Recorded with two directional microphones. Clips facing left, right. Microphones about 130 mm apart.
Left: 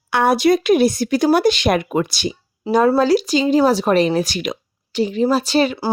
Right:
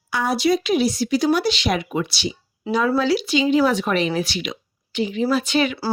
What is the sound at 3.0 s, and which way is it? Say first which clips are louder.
Speech: left 4 dB; 40° left (ahead or behind).